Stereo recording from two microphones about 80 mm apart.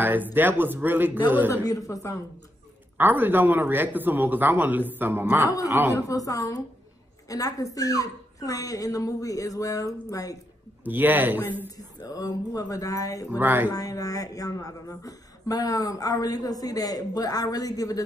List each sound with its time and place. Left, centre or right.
0.0 s speech: right
1.7 s speech: left
3.0 s speech: right
5.9 s speech: left
10.8 s speech: right
11.7 s speech: left
13.4 s speech: right
13.7 s speech: left